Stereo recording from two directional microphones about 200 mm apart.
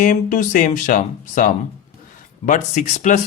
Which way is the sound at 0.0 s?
40° left (ahead or behind).